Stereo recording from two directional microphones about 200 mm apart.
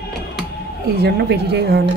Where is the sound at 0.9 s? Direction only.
55° right (ahead or behind).